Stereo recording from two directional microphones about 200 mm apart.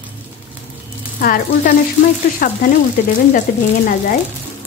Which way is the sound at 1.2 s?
45° left (ahead or behind).